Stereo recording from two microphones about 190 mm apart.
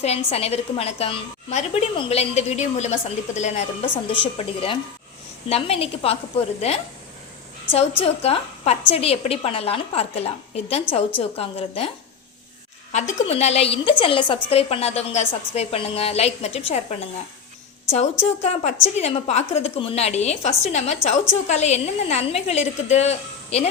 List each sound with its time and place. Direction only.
0.0 s a woman's voice: 35° left (ahead or behind)
12.9 s a woman's voice: 40° left (ahead or behind)